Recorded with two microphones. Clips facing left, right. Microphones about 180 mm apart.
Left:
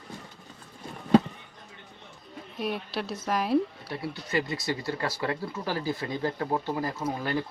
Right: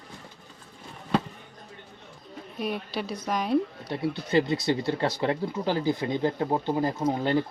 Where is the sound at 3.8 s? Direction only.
25° right (ahead or behind).